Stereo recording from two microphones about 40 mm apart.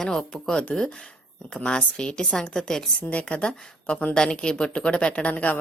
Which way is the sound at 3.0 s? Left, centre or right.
Left.